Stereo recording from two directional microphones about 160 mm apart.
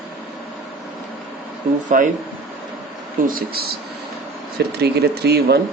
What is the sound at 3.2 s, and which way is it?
Speech, 65° right (ahead or behind).